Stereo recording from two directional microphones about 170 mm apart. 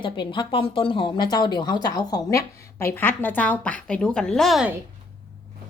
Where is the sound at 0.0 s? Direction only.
30° left (ahead or behind); by 4.7 s centre (ahead or behind).